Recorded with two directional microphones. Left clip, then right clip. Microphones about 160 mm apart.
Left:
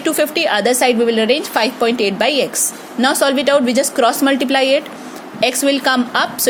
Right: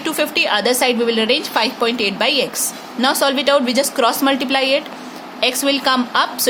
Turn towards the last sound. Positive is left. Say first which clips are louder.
# even
turn(degrees=20)  # may be behind; listen again after turning